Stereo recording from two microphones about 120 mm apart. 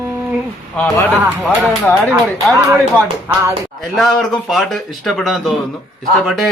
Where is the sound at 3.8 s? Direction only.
Centre (ahead or behind).